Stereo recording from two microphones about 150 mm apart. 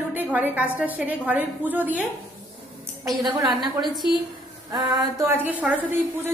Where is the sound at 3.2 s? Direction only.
30° right (ahead or behind).